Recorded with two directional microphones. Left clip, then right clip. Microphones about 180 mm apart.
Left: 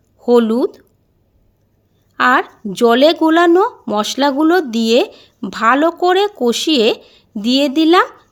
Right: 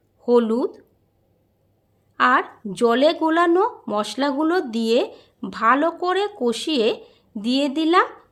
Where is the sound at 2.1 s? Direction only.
30° left (ahead or behind).